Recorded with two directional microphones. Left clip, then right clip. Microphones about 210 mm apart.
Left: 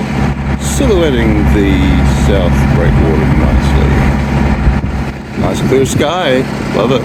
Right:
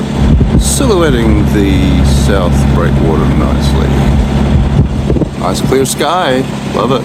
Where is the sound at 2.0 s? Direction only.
90° right.